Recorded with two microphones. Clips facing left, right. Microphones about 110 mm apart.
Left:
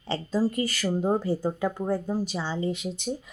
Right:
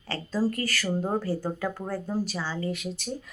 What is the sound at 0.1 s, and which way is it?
Speech, 20° left (ahead or behind).